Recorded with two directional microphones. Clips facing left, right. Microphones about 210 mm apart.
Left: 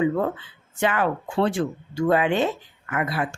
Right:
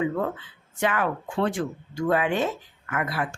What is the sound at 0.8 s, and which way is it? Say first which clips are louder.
Speech: left 2 dB; 30° left (ahead or behind).